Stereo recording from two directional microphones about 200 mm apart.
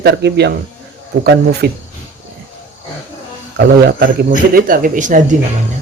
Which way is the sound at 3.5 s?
55° right (ahead or behind).